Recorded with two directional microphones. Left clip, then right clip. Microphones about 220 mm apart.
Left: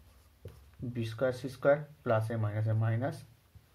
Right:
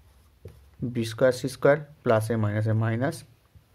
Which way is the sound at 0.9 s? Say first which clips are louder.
Right 10 dB; 50° right (ahead or behind).